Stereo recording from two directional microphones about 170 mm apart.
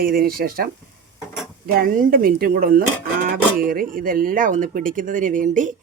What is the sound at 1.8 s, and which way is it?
A woman's voice, 55° right (ahead or behind).